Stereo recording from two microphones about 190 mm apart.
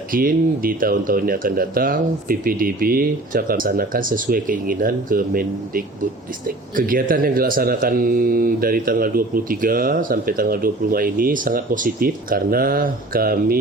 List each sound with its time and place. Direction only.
0.1 s speech: 50° right (ahead or behind)